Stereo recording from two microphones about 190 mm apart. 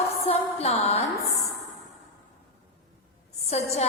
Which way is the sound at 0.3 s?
35° left (ahead or behind).